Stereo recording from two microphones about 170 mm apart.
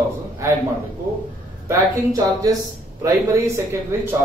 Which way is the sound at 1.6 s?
20° right (ahead or behind).